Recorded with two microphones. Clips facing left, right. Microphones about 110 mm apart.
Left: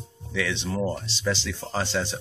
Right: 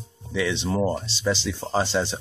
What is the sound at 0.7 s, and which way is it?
Speech, 30° right (ahead or behind).